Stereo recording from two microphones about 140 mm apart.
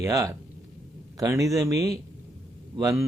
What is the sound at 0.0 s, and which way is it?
Speech, 25° right (ahead or behind).